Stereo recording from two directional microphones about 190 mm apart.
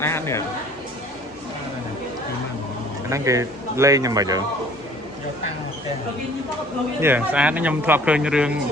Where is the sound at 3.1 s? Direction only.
15° right (ahead or behind).